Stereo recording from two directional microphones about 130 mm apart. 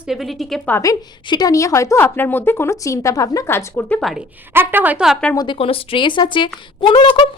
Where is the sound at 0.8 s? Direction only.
30° left (ahead or behind); by 4.0 s 10° left (ahead or behind).